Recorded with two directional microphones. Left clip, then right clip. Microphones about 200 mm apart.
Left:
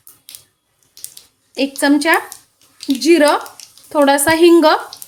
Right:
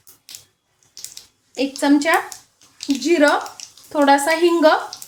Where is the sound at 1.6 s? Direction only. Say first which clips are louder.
Left 3 dB; 25° left (ahead or behind).